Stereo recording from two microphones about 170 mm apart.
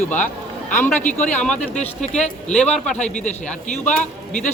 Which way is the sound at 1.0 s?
50° left (ahead or behind).